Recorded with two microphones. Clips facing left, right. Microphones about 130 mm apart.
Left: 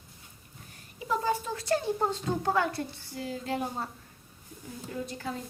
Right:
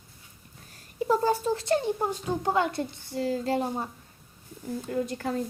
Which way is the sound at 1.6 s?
20° right (ahead or behind).